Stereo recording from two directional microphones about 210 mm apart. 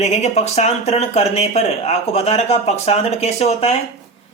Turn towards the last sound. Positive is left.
turn(degrees=30)  # may be behind; listen again after turning